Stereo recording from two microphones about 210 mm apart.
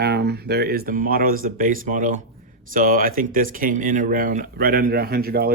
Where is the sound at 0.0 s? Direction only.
50° right (ahead or behind).